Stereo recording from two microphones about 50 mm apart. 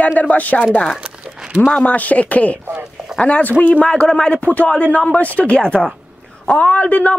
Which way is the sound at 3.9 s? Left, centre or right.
Centre.